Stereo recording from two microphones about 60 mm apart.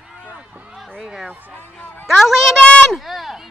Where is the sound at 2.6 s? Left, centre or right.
Centre.